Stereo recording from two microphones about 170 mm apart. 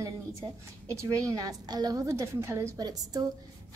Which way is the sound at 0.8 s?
20° right (ahead or behind).